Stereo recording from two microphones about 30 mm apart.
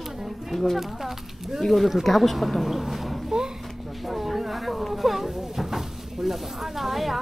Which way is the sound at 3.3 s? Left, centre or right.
Right.